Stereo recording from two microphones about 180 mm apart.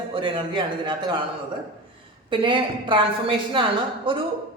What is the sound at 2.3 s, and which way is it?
Speech, 25° right (ahead or behind).